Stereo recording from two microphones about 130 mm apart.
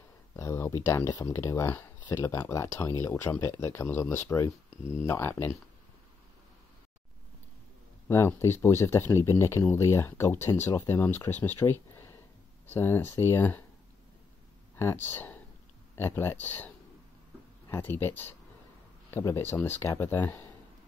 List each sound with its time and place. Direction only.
0.4 s speech: 25° left (ahead or behind)
8.1 s speech: 20° left (ahead or behind)
14.8 s speech: 20° left (ahead or behind)